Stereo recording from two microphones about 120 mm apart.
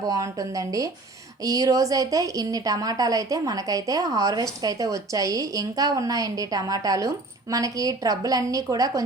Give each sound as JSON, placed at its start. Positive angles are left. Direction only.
{"t": 0.1, "sound": "a woman's voice", "side_deg": -30}